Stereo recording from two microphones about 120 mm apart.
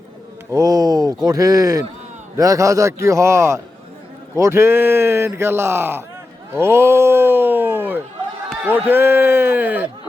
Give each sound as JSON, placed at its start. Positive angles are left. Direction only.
{"t": 0.5, "sound": "speech", "side_deg": -30}
{"t": 6.5, "sound": "a sound", "side_deg": -20}
{"t": 8.6, "sound": "a man's voice", "side_deg": -15}